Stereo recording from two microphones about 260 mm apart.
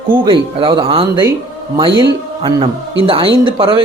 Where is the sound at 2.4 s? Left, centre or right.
Centre.